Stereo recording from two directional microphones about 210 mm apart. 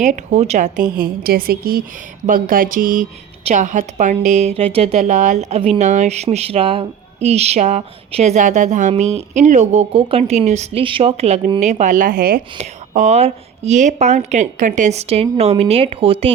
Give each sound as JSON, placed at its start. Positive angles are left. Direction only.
{"t": 0.0, "sound": "a woman's voice", "side_deg": -35}
{"t": 12.5, "sound": "a woman's voice", "side_deg": -35}